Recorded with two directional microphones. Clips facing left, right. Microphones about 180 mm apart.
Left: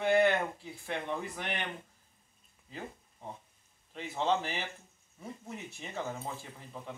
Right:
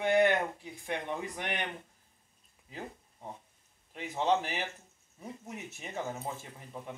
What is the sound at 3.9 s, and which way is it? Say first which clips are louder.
Speech: right 2 dB; 15° right (ahead or behind).